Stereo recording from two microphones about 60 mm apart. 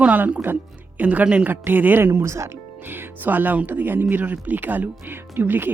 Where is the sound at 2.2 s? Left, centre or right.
Right.